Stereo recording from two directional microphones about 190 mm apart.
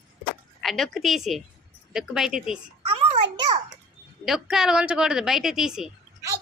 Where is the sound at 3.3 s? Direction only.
20° right (ahead or behind).